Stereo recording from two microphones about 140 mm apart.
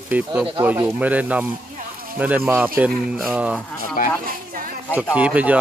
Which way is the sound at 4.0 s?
80° left.